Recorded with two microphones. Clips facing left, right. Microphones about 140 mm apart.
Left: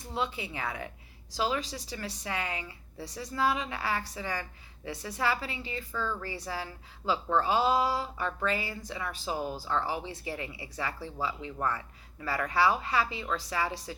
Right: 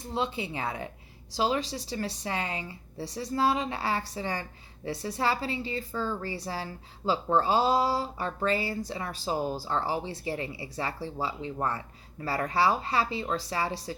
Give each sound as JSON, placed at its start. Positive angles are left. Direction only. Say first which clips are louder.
{"t": 0.0, "sound": "a woman's voice", "louder": "right 3 dB", "side_deg": -25}